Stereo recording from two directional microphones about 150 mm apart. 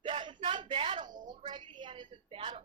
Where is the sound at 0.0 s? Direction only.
30° right (ahead or behind).